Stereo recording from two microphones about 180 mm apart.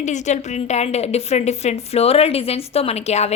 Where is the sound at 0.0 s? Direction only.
40° left (ahead or behind).